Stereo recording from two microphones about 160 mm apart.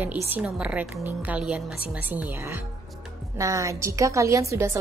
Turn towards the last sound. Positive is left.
turn(degrees=-20)  # may be behind; listen again after turning